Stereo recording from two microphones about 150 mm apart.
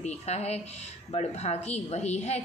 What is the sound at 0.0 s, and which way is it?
A woman's voice, 45° left (ahead or behind).